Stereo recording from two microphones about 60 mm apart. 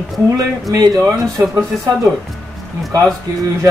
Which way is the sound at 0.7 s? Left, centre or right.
Right.